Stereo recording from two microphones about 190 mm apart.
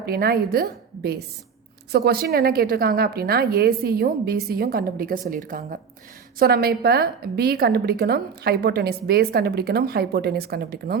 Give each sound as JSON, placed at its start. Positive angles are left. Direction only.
{"t": 0.0, "sound": "a woman's voice", "side_deg": -55}